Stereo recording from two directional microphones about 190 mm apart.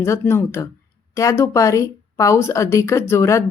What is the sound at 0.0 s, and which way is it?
A woman's voice, 15° left (ahead or behind).